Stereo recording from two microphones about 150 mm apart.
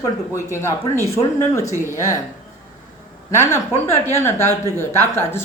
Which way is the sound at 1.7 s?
20° right (ahead or behind).